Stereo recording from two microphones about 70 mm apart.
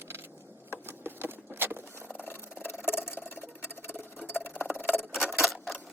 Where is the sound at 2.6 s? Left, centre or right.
Centre.